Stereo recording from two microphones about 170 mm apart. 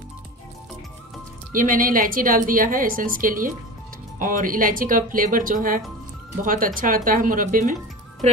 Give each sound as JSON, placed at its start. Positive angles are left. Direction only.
{"t": 1.5, "sound": "a woman's voice", "side_deg": -55}